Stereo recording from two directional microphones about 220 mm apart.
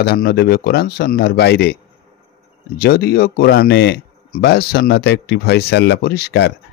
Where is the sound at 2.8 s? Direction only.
45° left (ahead or behind).